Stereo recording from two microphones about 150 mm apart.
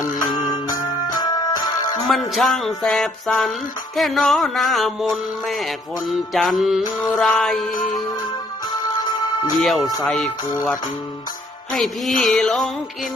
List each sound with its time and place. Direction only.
0.0 s music: 60° left (ahead or behind)
0.4 s music: 25° left (ahead or behind)
2.0 s music: centre (ahead or behind)
9.0 s music: 30° left (ahead or behind)
9.6 s music: centre (ahead or behind)
11.7 s music: centre (ahead or behind)